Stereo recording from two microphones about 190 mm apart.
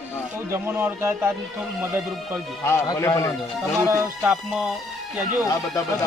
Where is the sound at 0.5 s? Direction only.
15° right (ahead or behind).